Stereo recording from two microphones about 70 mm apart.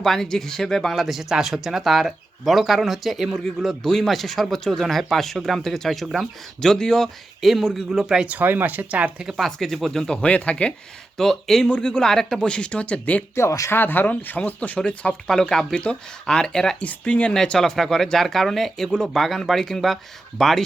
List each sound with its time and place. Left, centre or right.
0.0 s speech: centre
8.4 s speech: right
9.4 s speech: centre
11.2 s speech: centre
13.3 s speech: left
13.7 s speech: left; by 16.7 s centre
16.8 s speech: centre